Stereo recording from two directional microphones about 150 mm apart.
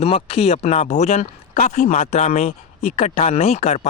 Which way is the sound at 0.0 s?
40° left (ahead or behind).